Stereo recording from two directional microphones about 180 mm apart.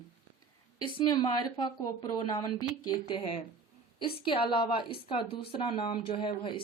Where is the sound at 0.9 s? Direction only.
25° left (ahead or behind).